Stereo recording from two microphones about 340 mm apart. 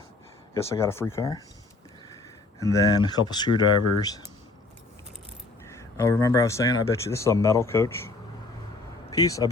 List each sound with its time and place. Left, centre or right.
0.5 s speech: centre
2.6 s speech: centre
5.6 s speech: centre